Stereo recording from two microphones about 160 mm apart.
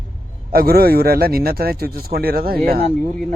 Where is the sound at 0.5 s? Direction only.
70° right (ahead or behind).